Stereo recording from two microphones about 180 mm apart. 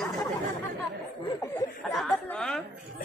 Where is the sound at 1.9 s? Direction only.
5° left (ahead or behind).